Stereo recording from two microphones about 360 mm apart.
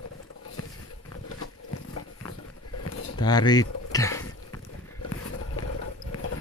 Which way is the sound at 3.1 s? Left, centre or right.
Centre.